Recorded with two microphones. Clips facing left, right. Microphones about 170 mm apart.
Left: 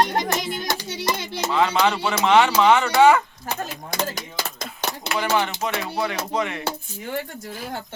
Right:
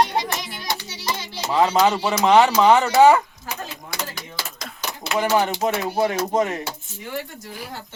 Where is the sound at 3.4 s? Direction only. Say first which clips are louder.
Left 3 dB; 50° left (ahead or behind).